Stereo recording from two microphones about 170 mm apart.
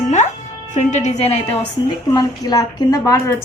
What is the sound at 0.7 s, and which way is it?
Speech, 45° left (ahead or behind).